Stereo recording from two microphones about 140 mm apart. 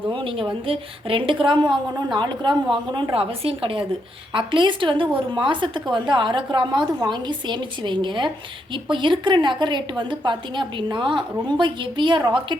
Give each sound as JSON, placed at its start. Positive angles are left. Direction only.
{"t": 0.1, "sound": "a woman's voice", "side_deg": -40}